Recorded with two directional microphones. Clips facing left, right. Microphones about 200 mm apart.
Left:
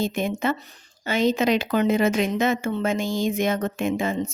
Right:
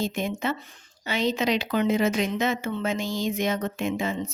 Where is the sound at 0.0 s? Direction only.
55° left (ahead or behind).